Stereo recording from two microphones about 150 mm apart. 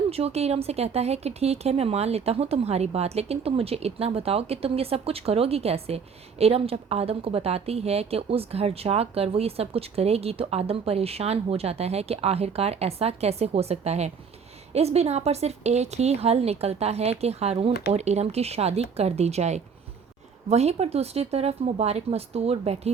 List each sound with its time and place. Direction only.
0.1 s a woman's voice: 45° right (ahead or behind)